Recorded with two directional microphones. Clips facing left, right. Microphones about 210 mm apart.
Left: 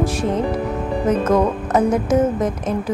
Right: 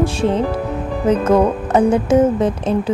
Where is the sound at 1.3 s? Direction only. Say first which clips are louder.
Right 3 dB; 30° right (ahead or behind).